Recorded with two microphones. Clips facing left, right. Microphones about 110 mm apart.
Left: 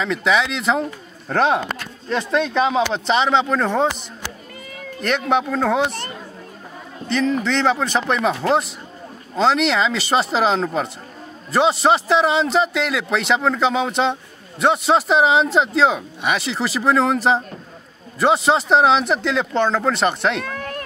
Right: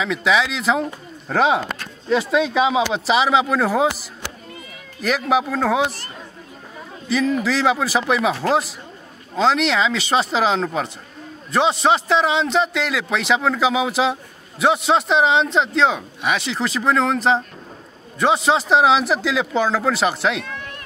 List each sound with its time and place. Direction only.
0.0 s speech: centre (ahead or behind)
5.0 s speech: 5° right (ahead or behind)
7.1 s speech: 5° right (ahead or behind)
20.4 s run: 50° left (ahead or behind)